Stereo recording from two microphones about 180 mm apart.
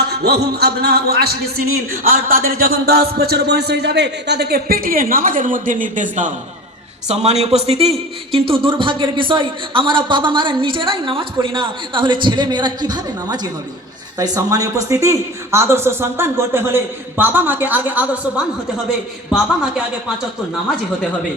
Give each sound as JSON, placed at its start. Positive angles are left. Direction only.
{"t": 0.1, "sound": "music", "side_deg": -60}
{"t": 2.0, "sound": "music", "side_deg": -50}
{"t": 7.1, "sound": "a man's voice", "side_deg": -35}